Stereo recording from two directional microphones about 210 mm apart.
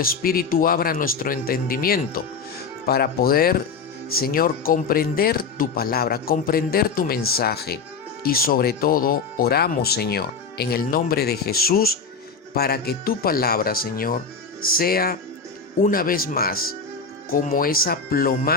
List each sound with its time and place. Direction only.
0.0 s speech: 45° left (ahead or behind)